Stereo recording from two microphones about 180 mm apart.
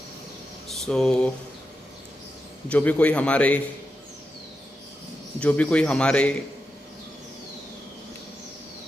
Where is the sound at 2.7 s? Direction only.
10° left (ahead or behind).